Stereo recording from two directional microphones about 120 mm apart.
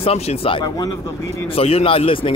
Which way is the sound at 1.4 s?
55° left (ahead or behind).